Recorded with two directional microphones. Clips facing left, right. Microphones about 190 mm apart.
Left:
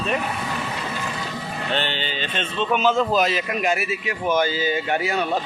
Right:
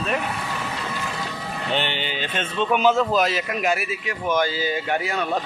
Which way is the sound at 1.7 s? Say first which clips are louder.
Right 1 dB; 15° right (ahead or behind).